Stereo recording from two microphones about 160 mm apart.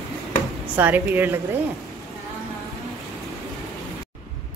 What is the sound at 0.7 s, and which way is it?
Speech, 10° right (ahead or behind).